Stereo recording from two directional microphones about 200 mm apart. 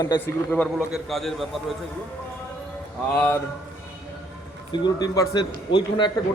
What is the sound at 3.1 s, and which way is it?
Speech, 10° left (ahead or behind).